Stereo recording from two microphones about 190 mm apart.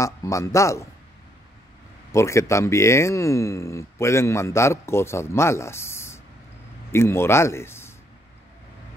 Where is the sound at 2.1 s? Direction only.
15° left (ahead or behind).